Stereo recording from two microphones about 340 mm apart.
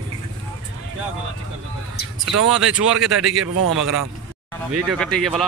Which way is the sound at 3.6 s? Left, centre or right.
Right.